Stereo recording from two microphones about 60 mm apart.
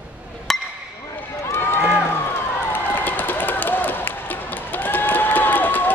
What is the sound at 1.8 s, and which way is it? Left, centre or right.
Run, centre.